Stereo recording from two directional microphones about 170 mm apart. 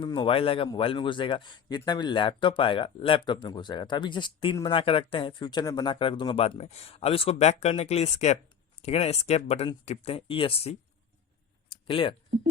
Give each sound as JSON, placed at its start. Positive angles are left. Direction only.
{"t": 0.0, "sound": "a man's voice", "side_deg": 25}
{"t": 11.9, "sound": "a man's voice", "side_deg": 30}